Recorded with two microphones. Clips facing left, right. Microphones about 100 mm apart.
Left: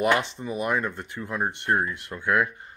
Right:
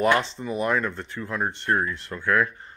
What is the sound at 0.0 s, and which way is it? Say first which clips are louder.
Speech: right 2 dB; 15° left (ahead or behind).